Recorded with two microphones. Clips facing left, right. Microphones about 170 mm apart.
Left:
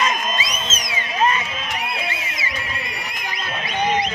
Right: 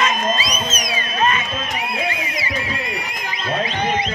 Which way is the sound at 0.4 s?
25° left (ahead or behind).